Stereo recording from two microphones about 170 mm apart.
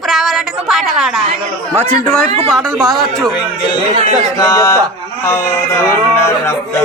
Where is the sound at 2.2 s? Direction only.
35° right (ahead or behind).